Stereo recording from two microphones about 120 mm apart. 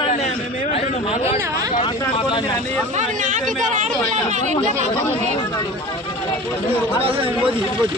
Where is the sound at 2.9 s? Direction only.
90° right.